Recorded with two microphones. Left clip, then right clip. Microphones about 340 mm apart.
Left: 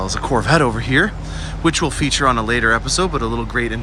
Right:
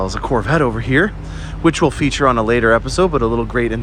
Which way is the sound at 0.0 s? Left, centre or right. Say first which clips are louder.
Right 1 dB; centre.